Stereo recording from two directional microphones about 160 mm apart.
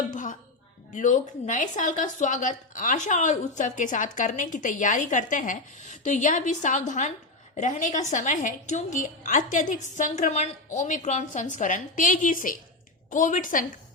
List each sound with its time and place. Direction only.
0.1 s music: 55° left (ahead or behind)
0.9 s speech: 50° left (ahead or behind)